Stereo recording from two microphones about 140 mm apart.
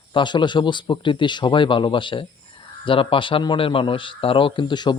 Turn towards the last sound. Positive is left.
turn(degrees=35)  # may be behind; listen again after turning